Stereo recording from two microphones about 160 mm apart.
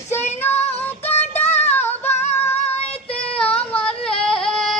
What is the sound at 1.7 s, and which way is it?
Music, 10° left (ahead or behind).